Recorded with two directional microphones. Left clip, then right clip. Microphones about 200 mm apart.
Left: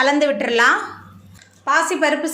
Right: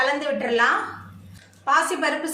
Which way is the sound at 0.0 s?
50° left (ahead or behind).